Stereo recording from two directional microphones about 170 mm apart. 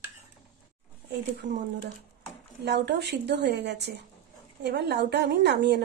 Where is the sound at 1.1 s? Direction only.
80° right.